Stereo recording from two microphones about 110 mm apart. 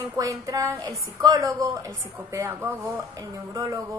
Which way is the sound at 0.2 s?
30° right (ahead or behind).